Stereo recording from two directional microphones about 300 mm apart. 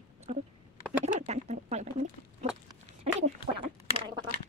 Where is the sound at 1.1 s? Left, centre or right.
Right.